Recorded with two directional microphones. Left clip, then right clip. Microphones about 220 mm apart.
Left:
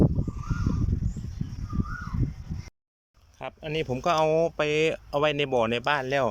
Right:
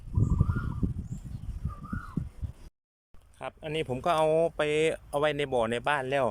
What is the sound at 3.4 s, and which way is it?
Speech, centre (ahead or behind).